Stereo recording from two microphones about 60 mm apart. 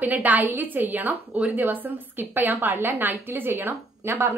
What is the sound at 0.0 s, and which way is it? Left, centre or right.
A woman's voice, right.